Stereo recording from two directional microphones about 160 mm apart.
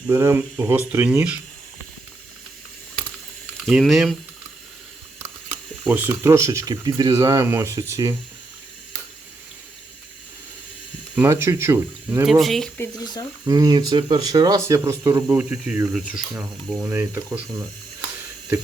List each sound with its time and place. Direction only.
0.1 s speech: 15° right (ahead or behind)
3.7 s speech: centre (ahead or behind)
5.8 s speech: 10° right (ahead or behind)
11.1 s speech: 15° right (ahead or behind)
12.2 s speech: centre (ahead or behind)
13.5 s speech: 25° right (ahead or behind); by 16.8 s centre (ahead or behind)
16.8 s speech: 15° right (ahead or behind)